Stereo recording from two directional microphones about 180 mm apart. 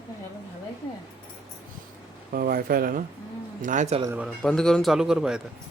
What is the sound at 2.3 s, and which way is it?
Speech, 55° right (ahead or behind).